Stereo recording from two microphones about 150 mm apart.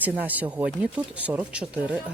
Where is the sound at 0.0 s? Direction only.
10° right (ahead or behind).